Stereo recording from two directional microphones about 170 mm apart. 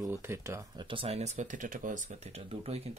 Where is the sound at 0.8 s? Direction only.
30° right (ahead or behind).